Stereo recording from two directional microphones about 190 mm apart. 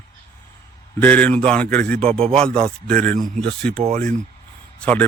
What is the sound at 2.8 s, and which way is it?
Speech, 10° left (ahead or behind).